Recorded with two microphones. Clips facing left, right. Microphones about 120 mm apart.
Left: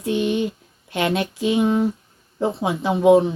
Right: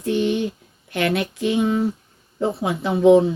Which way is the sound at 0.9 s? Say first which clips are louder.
Even; 20° left (ahead or behind).